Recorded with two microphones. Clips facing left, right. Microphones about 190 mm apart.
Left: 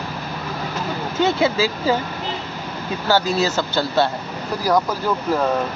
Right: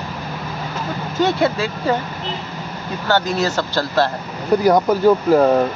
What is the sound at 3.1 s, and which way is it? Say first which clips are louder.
Speech: even; 5° left (ahead or behind).